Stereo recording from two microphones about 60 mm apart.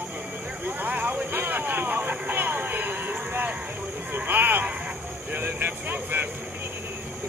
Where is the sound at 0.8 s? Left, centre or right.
Right.